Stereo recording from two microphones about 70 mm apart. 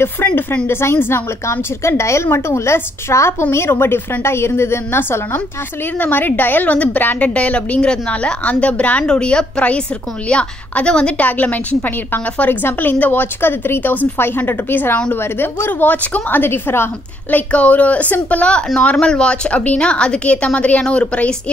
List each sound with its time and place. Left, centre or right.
0.0 s a woman's voice: left
17.5 s a woman's voice: left